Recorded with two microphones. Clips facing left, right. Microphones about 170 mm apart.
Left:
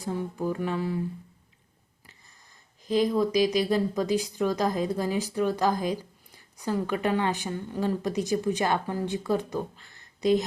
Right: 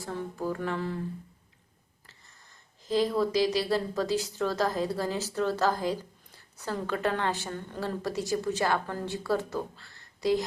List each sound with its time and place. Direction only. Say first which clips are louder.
0.0 s speech: left 3 dB; 15° left (ahead or behind)
2.8 s speech: left 2 dB; 15° left (ahead or behind)